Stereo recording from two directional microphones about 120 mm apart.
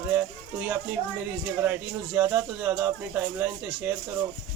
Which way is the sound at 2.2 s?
15° right (ahead or behind).